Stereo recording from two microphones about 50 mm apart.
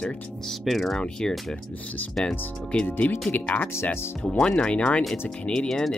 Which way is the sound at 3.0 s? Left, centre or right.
Left.